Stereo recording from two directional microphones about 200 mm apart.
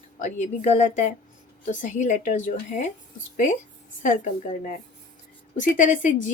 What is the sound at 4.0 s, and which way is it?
A woman's voice, 40° left (ahead or behind).